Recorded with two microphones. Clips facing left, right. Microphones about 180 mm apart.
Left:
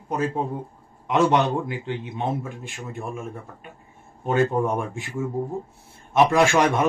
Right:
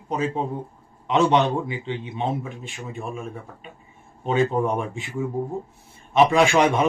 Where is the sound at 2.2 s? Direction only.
15° right (ahead or behind).